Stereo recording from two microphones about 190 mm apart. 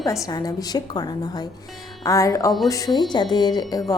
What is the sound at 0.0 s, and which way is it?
A woman's voice, 20° left (ahead or behind).